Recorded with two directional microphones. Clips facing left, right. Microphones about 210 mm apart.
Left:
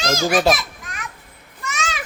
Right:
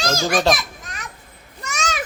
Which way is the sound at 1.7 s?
45° right (ahead or behind).